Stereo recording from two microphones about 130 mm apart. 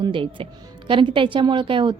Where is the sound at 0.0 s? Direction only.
40° right (ahead or behind).